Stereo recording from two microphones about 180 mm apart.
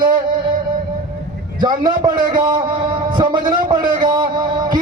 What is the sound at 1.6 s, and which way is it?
A man's voice, 25° right (ahead or behind).